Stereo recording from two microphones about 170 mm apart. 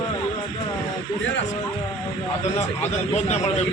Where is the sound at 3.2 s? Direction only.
40° left (ahead or behind).